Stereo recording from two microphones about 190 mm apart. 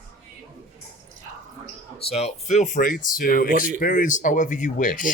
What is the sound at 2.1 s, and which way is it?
Speech, 35° left (ahead or behind).